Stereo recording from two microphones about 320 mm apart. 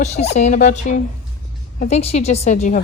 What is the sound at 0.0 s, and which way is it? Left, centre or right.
A woman's voice, left.